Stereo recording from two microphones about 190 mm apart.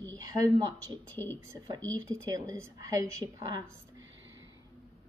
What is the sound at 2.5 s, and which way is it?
A woman's voice, 15° right (ahead or behind).